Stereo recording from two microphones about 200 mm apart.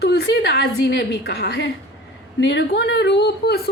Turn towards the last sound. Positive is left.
turn(degrees=55)  # may be behind; listen again after turning